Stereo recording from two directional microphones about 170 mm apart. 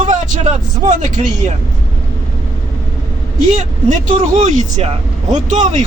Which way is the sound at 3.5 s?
45° right (ahead or behind).